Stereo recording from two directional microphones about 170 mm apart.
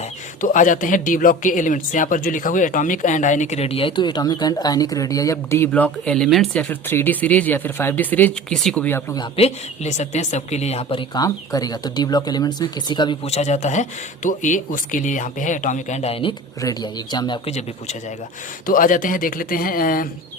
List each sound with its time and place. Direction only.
0.4 s speech: 50° left (ahead or behind); by 9.1 s 10° left (ahead or behind)
9.1 s a woman's voice: 35° left (ahead or behind)
16.6 s speech: 20° left (ahead or behind)
18.6 s speech: 55° left (ahead or behind)